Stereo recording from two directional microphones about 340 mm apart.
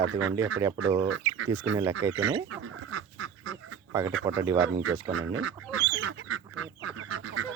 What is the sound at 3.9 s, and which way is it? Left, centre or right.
Speech, centre.